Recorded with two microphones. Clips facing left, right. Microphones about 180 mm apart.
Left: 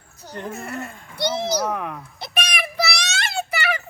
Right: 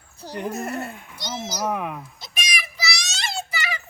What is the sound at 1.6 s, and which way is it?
Speech, 10° right (ahead or behind).